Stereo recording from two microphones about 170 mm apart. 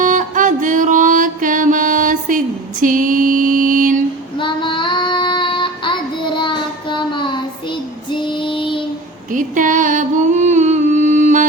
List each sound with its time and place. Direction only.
0.0 s music: 50° right (ahead or behind)
4.4 s child singing: 30° left (ahead or behind)
9.3 s music: 50° right (ahead or behind)